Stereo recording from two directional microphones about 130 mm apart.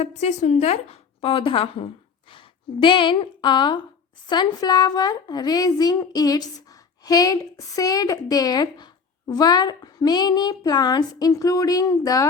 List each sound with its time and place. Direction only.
0.0 s a woman's voice: 65° left (ahead or behind); by 12.3 s 25° left (ahead or behind)